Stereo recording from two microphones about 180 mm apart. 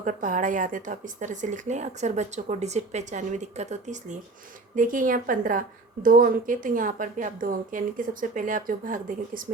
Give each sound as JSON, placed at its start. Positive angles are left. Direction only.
{"t": 0.0, "sound": "a woman's voice", "side_deg": -45}